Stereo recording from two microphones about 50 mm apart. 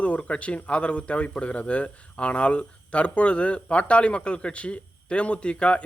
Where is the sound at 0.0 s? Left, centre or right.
Left.